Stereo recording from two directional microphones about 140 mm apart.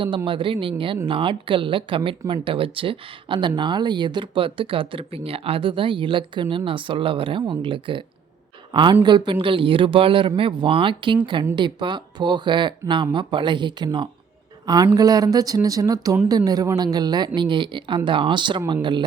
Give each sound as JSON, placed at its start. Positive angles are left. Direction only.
{"t": 0.3, "sound": "a woman's voice", "side_deg": -40}